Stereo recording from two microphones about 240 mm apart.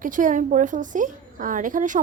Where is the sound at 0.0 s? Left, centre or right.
Right.